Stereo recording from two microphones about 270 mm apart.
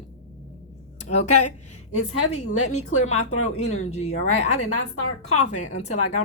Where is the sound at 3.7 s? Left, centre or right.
Left.